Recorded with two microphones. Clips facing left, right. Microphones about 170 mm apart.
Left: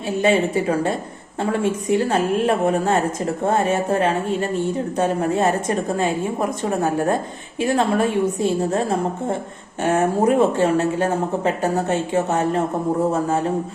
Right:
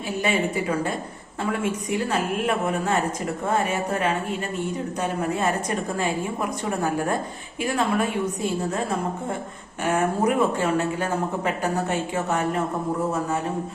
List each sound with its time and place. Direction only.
0.2 s speech: 25° left (ahead or behind)